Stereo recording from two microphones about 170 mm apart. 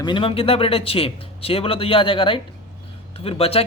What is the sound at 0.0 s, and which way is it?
Speech, 30° left (ahead or behind).